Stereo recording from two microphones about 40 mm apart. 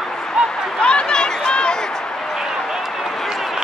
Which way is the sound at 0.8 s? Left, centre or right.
Left.